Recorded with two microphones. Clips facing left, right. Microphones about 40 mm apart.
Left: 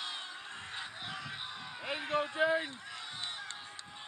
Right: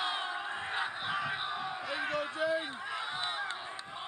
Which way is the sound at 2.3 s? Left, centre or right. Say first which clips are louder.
Left 2 dB; left.